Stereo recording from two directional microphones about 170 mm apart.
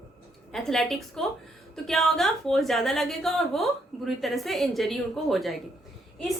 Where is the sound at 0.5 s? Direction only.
Centre (ahead or behind).